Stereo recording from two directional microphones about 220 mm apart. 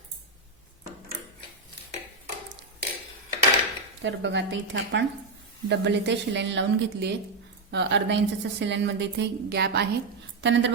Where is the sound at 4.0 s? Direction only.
55° right (ahead or behind).